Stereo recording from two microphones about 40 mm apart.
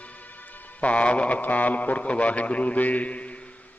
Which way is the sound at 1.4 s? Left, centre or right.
Left.